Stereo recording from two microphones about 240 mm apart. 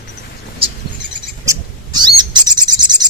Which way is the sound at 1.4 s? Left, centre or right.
Centre.